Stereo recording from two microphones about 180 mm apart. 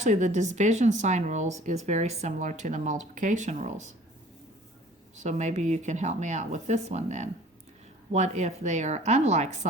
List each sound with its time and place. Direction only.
0.0 s speech: 40° right (ahead or behind)
5.2 s speech: 40° right (ahead or behind)